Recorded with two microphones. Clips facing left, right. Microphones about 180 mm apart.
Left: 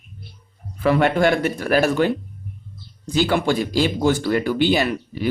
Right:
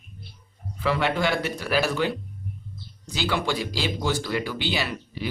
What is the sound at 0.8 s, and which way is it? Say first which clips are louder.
Speech: left 7 dB; 55° left (ahead or behind).